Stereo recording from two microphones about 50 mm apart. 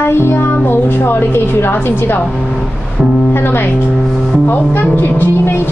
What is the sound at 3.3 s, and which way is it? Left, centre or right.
A woman's voice, left.